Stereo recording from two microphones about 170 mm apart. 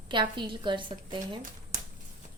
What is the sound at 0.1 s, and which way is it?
A woman's voice, 30° right (ahead or behind).